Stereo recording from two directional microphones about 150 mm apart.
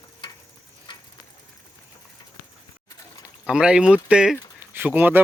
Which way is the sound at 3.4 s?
5° right (ahead or behind).